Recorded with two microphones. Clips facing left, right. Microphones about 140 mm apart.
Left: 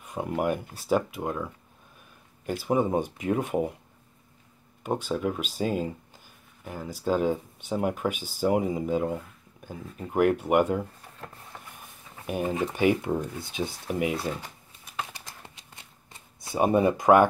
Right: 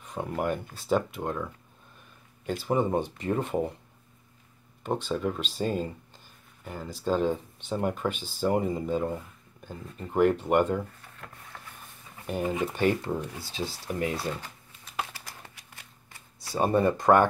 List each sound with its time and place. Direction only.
0.0 s speech: 10° left (ahead or behind)
4.8 s speech: 10° left (ahead or behind)
11.5 s vehicle: 15° left (ahead or behind)
12.3 s speech: 15° left (ahead or behind)
15.1 s shuffling cards: 20° left (ahead or behind)